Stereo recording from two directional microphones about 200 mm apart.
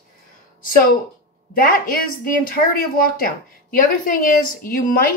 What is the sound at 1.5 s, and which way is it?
A woman's voice, 45° left (ahead or behind).